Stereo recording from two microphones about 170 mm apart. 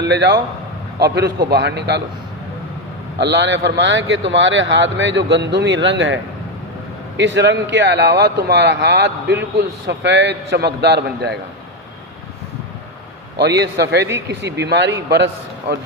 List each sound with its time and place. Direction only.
0.0 s a man's voice: 85° right
3.2 s a man's voice: 90° right
7.2 s speech: 90° right
13.4 s speech: 85° right